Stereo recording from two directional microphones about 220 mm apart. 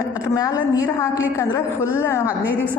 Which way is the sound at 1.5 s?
10° left (ahead or behind).